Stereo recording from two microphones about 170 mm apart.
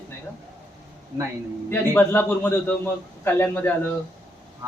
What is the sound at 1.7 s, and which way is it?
Speech, 10° left (ahead or behind).